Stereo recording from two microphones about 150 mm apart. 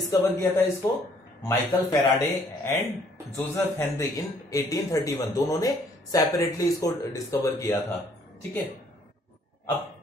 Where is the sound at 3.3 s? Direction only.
20° left (ahead or behind).